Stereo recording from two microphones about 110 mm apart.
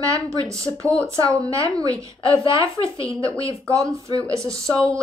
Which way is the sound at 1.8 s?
30° right (ahead or behind).